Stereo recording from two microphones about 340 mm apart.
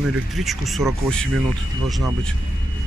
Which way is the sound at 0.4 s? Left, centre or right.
Centre.